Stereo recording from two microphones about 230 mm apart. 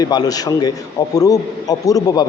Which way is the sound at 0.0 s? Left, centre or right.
Centre.